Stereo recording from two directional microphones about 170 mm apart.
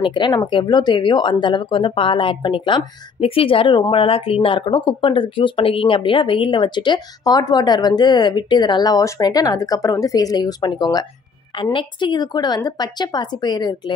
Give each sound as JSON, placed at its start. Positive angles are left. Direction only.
{"t": 0.0, "sound": "speech", "side_deg": 30}